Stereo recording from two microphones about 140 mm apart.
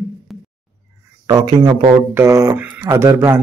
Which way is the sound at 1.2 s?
25° right (ahead or behind).